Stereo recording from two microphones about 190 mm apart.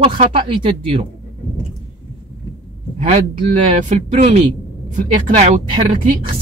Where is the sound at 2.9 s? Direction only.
35° right (ahead or behind).